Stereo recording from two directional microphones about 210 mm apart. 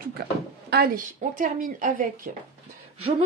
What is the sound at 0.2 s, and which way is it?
Speech, 50° right (ahead or behind).